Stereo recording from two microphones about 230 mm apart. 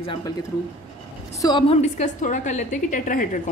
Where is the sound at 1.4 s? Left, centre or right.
Centre; by 3.4 s left.